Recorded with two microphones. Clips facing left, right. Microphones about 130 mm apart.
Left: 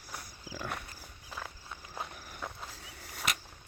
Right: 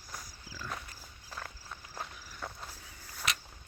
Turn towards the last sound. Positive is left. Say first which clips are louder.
# left 3 dB
turn(degrees=75)  # may be behind; listen again after turning